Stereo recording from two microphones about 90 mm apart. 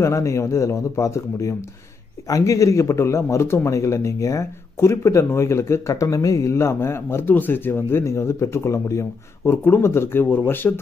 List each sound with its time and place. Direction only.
0.0 s a man's voice: 35° left (ahead or behind)